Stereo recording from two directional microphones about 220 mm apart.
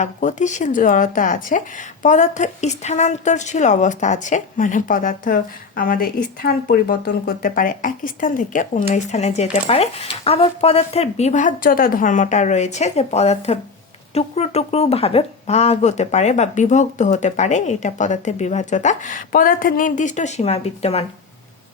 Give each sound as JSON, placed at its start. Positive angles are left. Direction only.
{"t": 0.0, "sound": "speech", "side_deg": 35}